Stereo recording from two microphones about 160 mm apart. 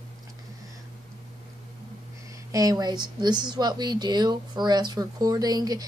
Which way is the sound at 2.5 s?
25° right (ahead or behind).